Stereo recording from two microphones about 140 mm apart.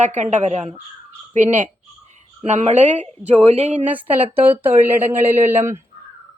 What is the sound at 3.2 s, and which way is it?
Speech, 45° right (ahead or behind).